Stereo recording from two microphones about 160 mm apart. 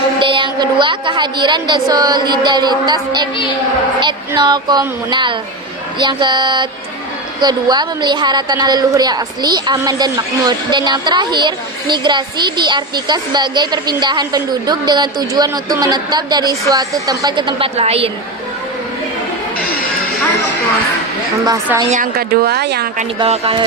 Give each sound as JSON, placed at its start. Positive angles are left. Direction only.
{"t": 0.2, "sound": "a woman's voice", "side_deg": -30}
{"t": 4.4, "sound": "a woman's voice", "side_deg": -25}
{"t": 21.8, "sound": "a woman's voice", "side_deg": -55}
{"t": 23.2, "sound": "a woman's voice", "side_deg": -35}